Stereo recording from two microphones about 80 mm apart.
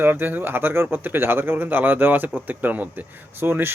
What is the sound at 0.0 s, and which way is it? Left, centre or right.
Speech, right.